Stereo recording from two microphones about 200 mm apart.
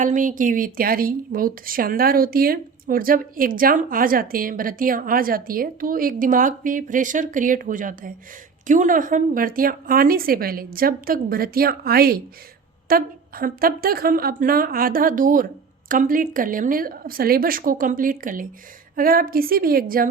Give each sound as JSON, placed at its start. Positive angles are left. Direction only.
{"t": 0.0, "sound": "a woman's voice", "side_deg": -40}